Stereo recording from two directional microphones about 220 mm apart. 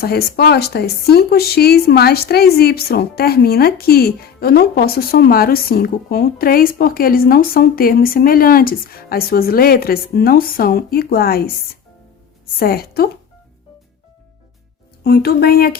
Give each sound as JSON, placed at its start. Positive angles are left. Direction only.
{"t": 0.0, "sound": "speech", "side_deg": 45}
{"t": 15.0, "sound": "speech", "side_deg": 45}